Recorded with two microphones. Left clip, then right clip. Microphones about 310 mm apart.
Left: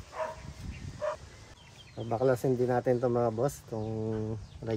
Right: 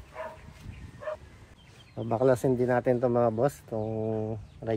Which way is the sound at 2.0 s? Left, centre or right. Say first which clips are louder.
Right 3 dB; right.